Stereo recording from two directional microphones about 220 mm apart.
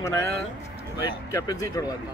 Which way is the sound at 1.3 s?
15° left (ahead or behind).